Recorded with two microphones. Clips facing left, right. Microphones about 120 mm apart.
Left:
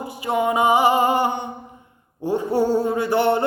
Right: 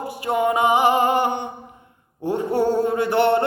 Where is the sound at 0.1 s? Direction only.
Centre (ahead or behind).